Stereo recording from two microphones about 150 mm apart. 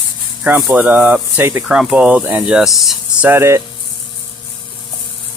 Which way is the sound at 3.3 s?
15° right (ahead or behind).